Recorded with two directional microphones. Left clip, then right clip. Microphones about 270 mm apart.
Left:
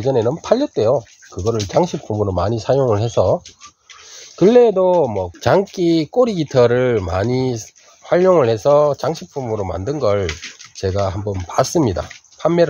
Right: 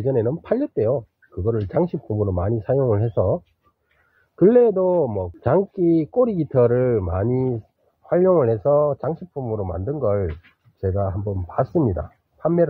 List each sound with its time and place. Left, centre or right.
0.0 s speech: centre
4.4 s speech: centre